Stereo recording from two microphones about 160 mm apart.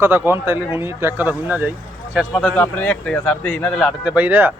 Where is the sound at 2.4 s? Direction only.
10° left (ahead or behind).